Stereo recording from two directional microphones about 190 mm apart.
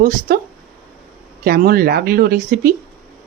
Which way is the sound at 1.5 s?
50° right (ahead or behind).